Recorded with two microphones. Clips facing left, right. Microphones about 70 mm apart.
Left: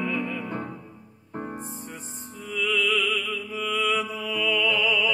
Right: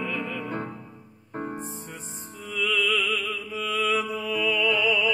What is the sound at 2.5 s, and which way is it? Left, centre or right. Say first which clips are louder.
Music: left 1 dB; centre.